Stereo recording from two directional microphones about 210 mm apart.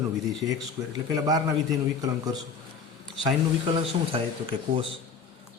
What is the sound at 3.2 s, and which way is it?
Speech, 20° right (ahead or behind).